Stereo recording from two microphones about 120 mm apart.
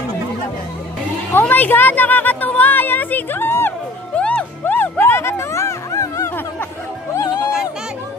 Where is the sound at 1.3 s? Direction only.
15° left (ahead or behind).